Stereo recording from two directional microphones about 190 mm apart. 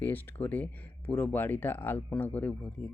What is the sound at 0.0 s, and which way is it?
Speech, 10° left (ahead or behind).